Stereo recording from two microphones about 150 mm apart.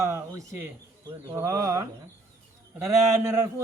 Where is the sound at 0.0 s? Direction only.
20° right (ahead or behind).